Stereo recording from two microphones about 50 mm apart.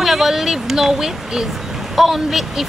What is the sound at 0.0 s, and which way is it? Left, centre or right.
Speech, centre.